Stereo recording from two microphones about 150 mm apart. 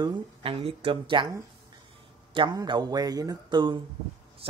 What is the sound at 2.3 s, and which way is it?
Speech, 30° right (ahead or behind).